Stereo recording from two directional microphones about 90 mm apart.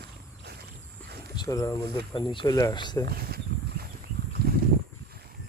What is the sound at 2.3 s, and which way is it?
Speech, 55° left (ahead or behind).